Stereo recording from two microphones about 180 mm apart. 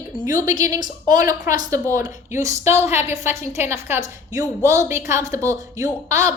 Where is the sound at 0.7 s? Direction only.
20° right (ahead or behind).